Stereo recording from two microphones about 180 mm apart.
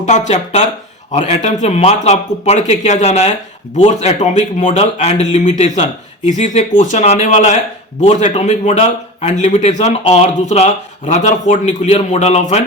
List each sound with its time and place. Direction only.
0.0 s speech: 40° left (ahead or behind)